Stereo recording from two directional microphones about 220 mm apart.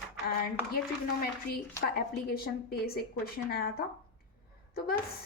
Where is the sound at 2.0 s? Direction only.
45° left (ahead or behind).